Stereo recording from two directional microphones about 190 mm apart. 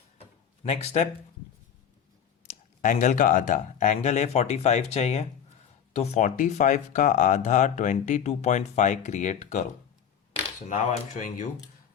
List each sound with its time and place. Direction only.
0.2 s a sound: 35° left (ahead or behind)
2.8 s speech: 40° left (ahead or behind)
10.7 s speech: 40° left (ahead or behind)